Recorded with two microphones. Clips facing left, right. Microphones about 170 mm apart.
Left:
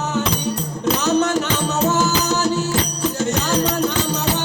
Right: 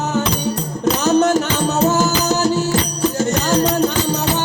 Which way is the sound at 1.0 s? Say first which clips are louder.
Right 4 dB; 45° right (ahead or behind).